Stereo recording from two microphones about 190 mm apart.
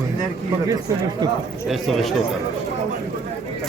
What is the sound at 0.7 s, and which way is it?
Speech, 20° right (ahead or behind).